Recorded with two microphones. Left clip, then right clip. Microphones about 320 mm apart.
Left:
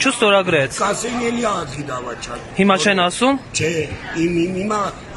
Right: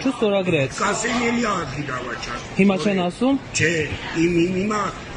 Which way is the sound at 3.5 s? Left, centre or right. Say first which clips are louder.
Even; centre.